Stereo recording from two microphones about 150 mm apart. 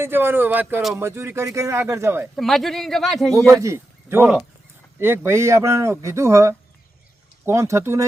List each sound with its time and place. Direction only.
0.0 s speech: 15° right (ahead or behind)
2.3 s speech: centre (ahead or behind)
3.5 s a man's voice: 20° right (ahead or behind)